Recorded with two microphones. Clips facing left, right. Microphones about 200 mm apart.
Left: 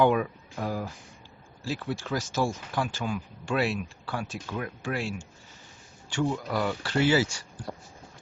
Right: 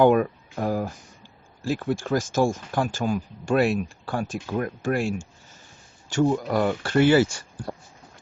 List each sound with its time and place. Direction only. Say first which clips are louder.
0.0 s speech: right 5 dB; 50° right (ahead or behind)
7.7 s vehicle: right 4 dB; 60° right (ahead or behind)